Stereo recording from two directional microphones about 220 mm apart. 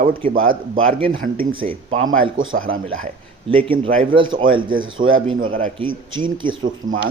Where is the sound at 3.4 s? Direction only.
25° right (ahead or behind).